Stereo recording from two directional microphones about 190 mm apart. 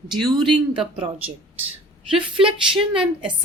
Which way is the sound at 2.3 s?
30° right (ahead or behind).